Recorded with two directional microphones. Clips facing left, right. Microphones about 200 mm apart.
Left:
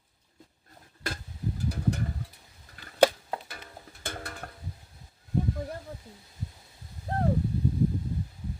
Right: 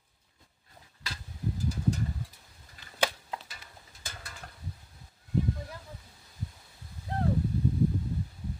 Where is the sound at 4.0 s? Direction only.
60° left (ahead or behind).